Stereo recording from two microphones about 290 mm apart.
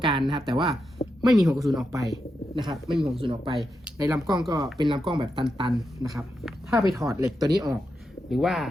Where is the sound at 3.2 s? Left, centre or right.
Centre.